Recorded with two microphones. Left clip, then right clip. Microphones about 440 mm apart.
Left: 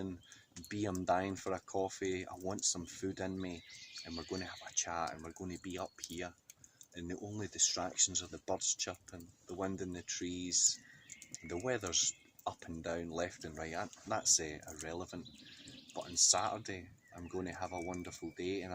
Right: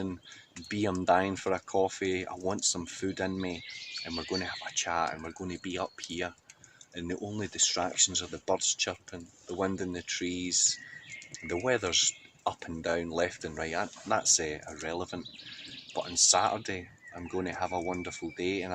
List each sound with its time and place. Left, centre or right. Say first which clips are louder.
0.7 s speech: right 8 dB; right